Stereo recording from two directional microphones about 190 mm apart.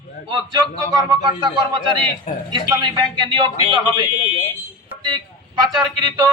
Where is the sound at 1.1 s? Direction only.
20° right (ahead or behind).